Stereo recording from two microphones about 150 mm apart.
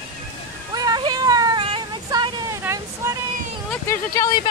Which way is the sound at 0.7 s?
25° right (ahead or behind).